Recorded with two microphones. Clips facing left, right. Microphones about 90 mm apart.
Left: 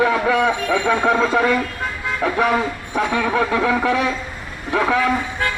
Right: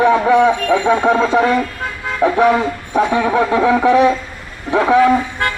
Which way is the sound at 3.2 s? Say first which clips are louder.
Right 5 dB; 15° right (ahead or behind).